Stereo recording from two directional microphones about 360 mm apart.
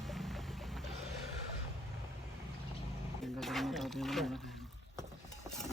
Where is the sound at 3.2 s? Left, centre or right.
Centre.